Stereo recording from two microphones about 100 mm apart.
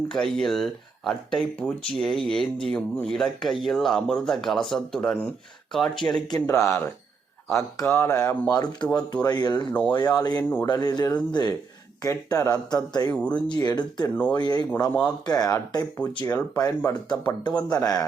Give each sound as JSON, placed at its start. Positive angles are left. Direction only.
{"t": 0.1, "sound": "speech", "side_deg": 5}
{"t": 6.4, "sound": "speech", "side_deg": 30}
{"t": 8.0, "sound": "speech", "side_deg": 25}
{"t": 8.5, "sound": "speech", "side_deg": 40}
{"t": 12.0, "sound": "speech", "side_deg": 35}
{"t": 13.1, "sound": "speech", "side_deg": 15}
{"t": 13.5, "sound": "speech", "side_deg": 45}
{"t": 14.1, "sound": "speech", "side_deg": 15}
{"t": 14.3, "sound": "speech", "side_deg": 45}
{"t": 17.7, "sound": "speech", "side_deg": 35}